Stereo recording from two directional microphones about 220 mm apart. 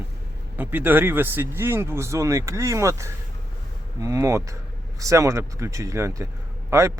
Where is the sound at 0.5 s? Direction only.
10° right (ahead or behind).